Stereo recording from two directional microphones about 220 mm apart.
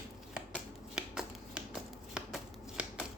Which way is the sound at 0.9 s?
5° right (ahead or behind).